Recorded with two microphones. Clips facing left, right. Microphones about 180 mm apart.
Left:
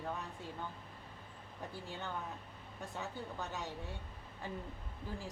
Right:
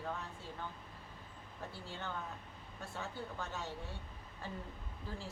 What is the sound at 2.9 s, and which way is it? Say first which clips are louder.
Speech: even; 15° left (ahead or behind).